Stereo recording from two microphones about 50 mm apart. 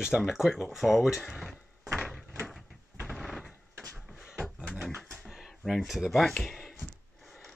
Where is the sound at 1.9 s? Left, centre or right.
Centre.